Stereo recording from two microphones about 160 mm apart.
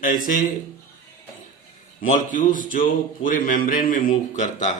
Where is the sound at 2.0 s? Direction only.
55° left (ahead or behind).